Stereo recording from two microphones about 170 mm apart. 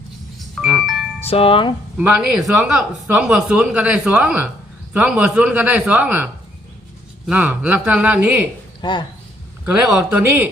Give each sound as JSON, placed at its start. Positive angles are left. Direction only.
{"t": 0.3, "sound": "music", "side_deg": 0}
{"t": 1.2, "sound": "speech", "side_deg": 35}
{"t": 2.0, "sound": "speech", "side_deg": -10}
{"t": 7.3, "sound": "speech", "side_deg": -5}
{"t": 8.8, "sound": "speech", "side_deg": 25}
{"t": 9.6, "sound": "speech", "side_deg": -10}